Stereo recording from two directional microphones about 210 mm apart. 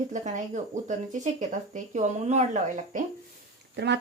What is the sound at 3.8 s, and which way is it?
Speech, 55° right (ahead or behind).